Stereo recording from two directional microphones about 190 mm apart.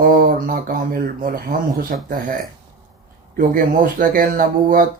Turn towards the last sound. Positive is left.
turn(degrees=-50)  # may be behind; listen again after turning